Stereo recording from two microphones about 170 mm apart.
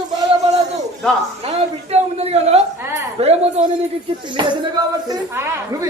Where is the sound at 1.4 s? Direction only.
40° right (ahead or behind).